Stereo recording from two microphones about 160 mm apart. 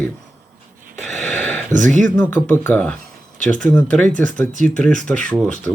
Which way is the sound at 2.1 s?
10° left (ahead or behind).